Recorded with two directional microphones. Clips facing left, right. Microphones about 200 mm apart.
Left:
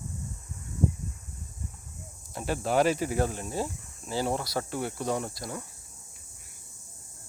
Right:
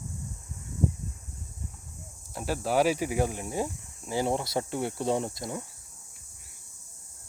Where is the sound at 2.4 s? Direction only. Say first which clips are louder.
Even; 5° right (ahead or behind); by 5.6 s 20° right (ahead or behind).